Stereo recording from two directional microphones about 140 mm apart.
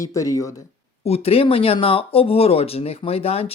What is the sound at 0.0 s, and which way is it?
Speech, 25° left (ahead or behind).